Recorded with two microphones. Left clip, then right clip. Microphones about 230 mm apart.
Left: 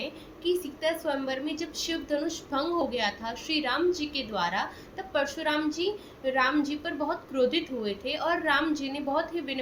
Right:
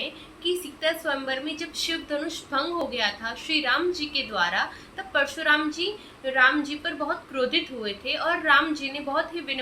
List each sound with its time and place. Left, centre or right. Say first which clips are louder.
0.4 s a woman's voice: right 2 dB; centre